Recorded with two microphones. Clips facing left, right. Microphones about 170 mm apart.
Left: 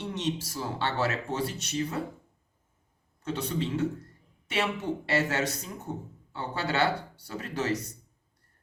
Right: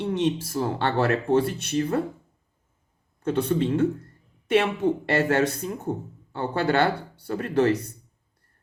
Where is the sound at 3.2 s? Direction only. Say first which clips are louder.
Right 8 dB; 55° right (ahead or behind).